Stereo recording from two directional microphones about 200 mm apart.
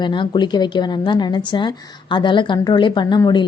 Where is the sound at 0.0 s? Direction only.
25° left (ahead or behind).